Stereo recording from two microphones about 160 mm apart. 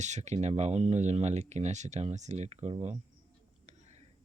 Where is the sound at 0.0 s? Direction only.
45° right (ahead or behind).